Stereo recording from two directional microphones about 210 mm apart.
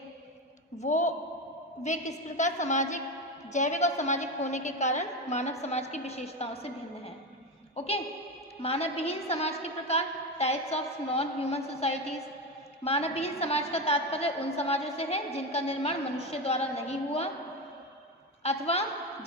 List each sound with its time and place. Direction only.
0.8 s a woman's voice: 35° left (ahead or behind)
7.8 s a woman's voice: 30° left (ahead or behind)
18.4 s a woman's voice: 30° left (ahead or behind)